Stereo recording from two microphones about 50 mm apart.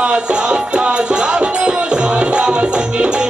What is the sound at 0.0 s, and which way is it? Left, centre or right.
Music, centre.